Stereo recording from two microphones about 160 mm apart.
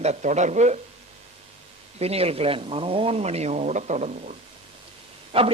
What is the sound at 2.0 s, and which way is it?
Speech, 40° right (ahead or behind).